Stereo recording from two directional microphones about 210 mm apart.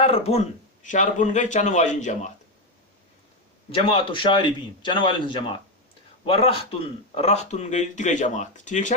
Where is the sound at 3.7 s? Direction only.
25° left (ahead or behind).